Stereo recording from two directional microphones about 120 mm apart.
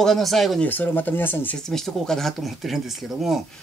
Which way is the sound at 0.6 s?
15° left (ahead or behind).